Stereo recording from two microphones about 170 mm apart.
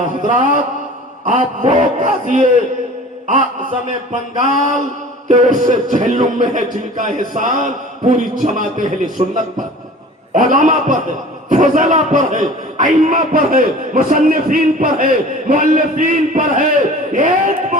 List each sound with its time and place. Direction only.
0.0 s a man's voice: 50° right (ahead or behind)